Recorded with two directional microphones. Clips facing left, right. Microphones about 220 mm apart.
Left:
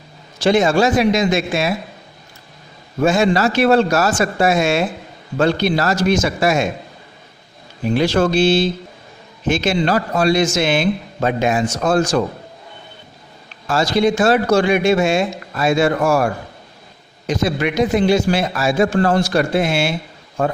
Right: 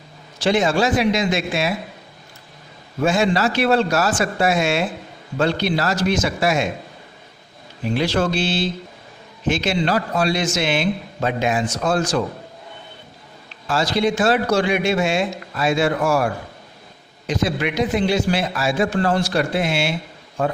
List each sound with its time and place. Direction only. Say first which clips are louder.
0.4 s a man's voice: left 4 dB; 45° left (ahead or behind)
3.0 s a man's voice: left 3 dB; 45° left (ahead or behind)
7.9 s a man's voice: left 4 dB; 45° left (ahead or behind)
13.7 s a man's voice: left 4 dB; 45° left (ahead or behind)